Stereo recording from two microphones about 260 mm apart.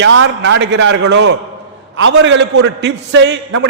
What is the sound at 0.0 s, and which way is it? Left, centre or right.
A man's voice, right.